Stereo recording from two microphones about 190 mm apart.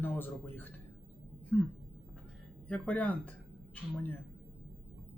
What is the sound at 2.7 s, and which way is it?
Speech, 5° left (ahead or behind).